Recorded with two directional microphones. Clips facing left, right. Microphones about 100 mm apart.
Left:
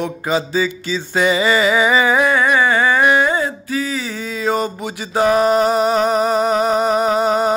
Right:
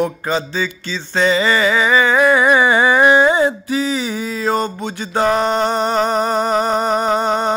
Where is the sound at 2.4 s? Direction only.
15° right (ahead or behind).